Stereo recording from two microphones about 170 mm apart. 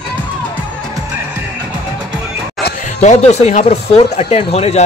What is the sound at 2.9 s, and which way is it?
Speech, 40° left (ahead or behind).